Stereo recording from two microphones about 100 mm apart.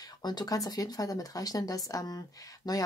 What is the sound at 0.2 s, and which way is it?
Speech, 45° left (ahead or behind).